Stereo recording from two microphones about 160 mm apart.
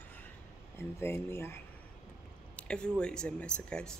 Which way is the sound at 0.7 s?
15° left (ahead or behind).